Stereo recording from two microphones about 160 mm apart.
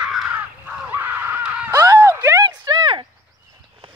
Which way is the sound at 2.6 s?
30° right (ahead or behind).